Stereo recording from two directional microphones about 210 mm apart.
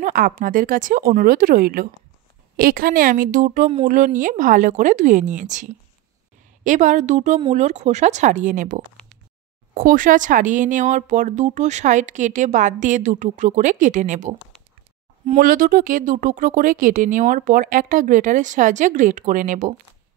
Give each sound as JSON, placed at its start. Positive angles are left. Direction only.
{"t": 0.0, "sound": "speech", "side_deg": -40}